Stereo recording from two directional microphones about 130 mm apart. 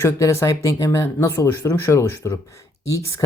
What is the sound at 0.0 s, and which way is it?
Speech, 20° left (ahead or behind).